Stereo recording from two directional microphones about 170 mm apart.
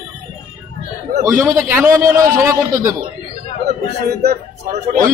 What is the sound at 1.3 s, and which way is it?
Speech, 15° right (ahead or behind).